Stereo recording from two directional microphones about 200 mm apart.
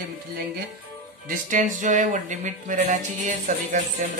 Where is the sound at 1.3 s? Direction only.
40° right (ahead or behind).